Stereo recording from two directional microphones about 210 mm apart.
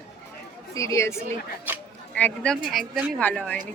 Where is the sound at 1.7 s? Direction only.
10° right (ahead or behind).